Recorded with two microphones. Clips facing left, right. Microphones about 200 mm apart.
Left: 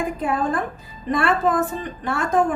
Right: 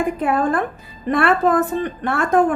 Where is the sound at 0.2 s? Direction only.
60° right (ahead or behind).